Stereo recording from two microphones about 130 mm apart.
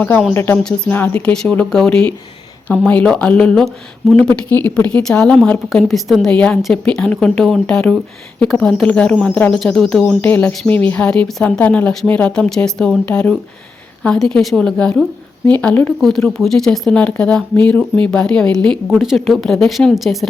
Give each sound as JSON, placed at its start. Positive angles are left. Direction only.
{"t": 0.3, "sound": "a woman's voice", "side_deg": 15}
{"t": 16.0, "sound": "a woman's voice", "side_deg": 5}